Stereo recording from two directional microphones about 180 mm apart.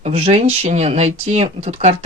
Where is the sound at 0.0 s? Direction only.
35° right (ahead or behind).